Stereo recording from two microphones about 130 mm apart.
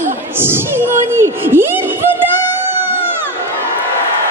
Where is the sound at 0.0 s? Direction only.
15° right (ahead or behind).